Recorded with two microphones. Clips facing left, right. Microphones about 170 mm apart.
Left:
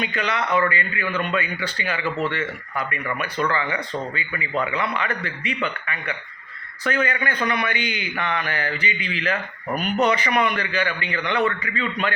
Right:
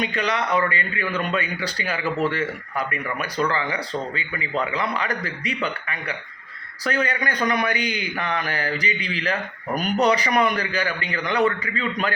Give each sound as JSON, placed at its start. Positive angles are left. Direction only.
{"t": 0.0, "sound": "a man's voice", "side_deg": -35}